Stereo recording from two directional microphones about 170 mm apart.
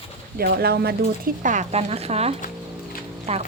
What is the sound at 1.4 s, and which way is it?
Speech, 45° right (ahead or behind).